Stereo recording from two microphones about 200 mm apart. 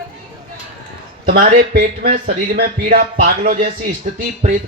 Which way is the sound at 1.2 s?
50° right (ahead or behind).